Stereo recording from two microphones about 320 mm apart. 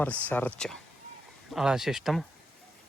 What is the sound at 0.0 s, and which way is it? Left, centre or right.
Speech, centre.